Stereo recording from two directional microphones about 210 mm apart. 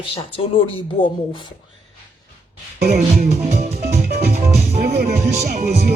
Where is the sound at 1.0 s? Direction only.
40° left (ahead or behind).